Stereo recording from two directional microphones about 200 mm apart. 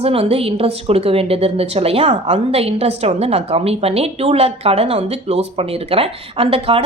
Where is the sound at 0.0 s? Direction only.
30° right (ahead or behind).